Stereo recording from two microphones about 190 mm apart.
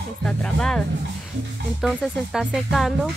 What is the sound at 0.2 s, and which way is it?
Speech, 5° left (ahead or behind).